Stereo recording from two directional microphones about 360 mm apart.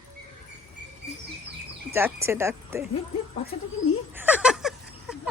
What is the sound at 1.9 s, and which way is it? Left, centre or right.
Speech, centre.